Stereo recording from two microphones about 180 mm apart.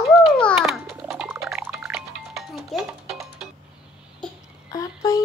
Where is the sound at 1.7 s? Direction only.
Centre (ahead or behind).